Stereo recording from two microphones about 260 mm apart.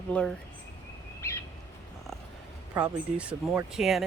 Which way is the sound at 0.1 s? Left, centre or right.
Centre.